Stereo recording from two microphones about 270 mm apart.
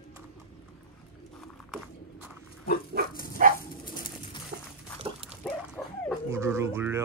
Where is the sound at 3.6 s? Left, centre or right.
Centre.